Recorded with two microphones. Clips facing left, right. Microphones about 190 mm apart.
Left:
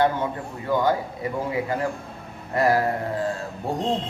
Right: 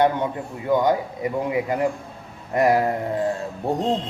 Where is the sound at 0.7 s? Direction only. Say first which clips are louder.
Right 3 dB; 20° right (ahead or behind).